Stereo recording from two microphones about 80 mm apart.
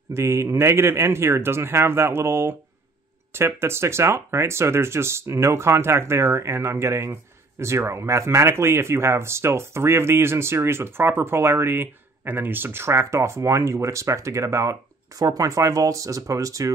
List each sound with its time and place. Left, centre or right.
0.1 s speech: right